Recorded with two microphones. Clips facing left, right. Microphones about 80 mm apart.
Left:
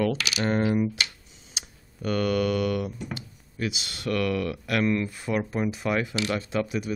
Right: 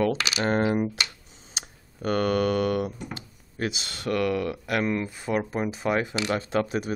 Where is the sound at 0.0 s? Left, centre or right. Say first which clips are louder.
Right 1 dB; right.